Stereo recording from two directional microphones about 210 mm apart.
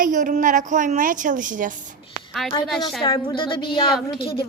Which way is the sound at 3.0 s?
25° left (ahead or behind).